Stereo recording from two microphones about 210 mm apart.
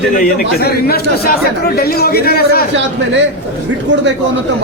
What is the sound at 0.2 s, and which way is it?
Speech, 45° left (ahead or behind).